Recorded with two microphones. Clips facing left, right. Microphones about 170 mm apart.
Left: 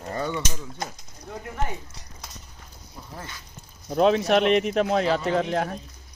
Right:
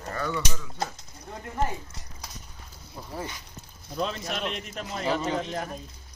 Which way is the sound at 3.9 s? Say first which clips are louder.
Left 12 dB; 70° left (ahead or behind).